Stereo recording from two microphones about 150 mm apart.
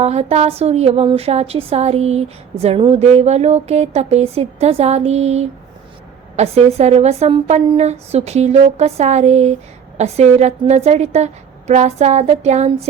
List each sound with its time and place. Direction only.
0.0 s a woman's voice: 45° right (ahead or behind)